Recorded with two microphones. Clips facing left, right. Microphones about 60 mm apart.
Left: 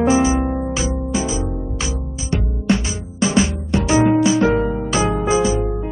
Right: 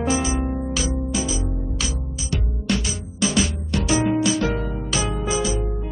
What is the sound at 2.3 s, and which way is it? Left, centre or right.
Music, left.